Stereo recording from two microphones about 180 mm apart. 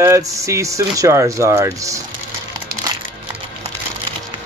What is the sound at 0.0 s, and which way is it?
Speech, 15° right (ahead or behind).